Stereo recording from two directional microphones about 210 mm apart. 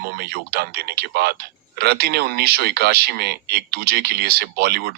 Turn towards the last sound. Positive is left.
turn(degrees=-50)  # may be behind; listen again after turning